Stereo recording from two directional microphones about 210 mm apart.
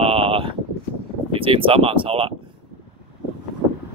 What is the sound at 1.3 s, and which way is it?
Speech, 25° right (ahead or behind).